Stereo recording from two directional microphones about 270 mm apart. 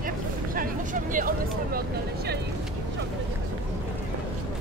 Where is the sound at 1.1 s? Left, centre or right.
Right.